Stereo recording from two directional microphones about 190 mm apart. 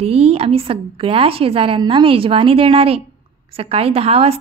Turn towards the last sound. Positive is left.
turn(degrees=-30)  # may be behind; listen again after turning